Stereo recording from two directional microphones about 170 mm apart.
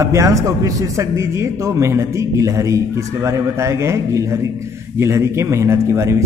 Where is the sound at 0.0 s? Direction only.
20° right (ahead or behind).